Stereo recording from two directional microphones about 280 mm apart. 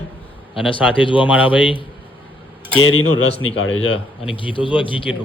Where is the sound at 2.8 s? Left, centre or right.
Left.